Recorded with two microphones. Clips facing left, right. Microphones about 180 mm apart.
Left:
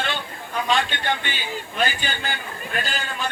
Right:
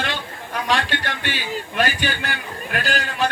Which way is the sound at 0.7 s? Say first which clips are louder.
Even; 75° right (ahead or behind).